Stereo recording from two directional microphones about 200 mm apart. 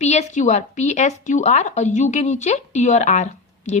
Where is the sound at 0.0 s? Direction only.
35° left (ahead or behind).